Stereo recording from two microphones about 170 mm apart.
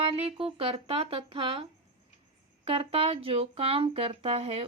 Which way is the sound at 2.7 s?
35° right (ahead or behind).